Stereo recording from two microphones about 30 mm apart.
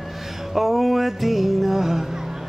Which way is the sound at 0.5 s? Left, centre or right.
Centre.